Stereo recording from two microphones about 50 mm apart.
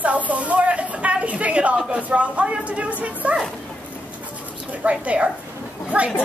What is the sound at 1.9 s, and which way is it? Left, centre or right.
Speech, right.